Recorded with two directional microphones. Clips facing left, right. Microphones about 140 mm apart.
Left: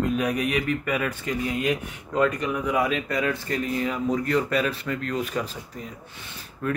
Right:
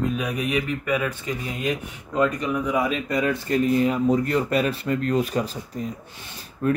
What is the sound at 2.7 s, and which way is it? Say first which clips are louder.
Speech: even; 20° right (ahead or behind).